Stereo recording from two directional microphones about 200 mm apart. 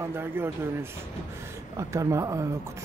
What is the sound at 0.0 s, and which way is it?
Speech, 10° right (ahead or behind).